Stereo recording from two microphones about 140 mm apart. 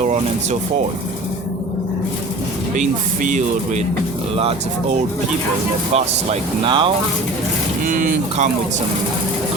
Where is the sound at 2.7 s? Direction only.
65° right (ahead or behind).